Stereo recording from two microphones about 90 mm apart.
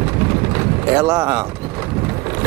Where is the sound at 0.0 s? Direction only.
30° right (ahead or behind).